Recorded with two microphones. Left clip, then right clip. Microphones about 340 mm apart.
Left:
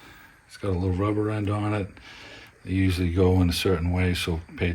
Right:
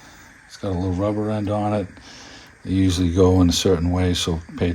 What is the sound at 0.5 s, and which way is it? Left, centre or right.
Speech, right.